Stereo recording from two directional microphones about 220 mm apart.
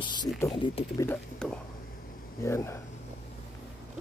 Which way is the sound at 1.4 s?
5° left (ahead or behind).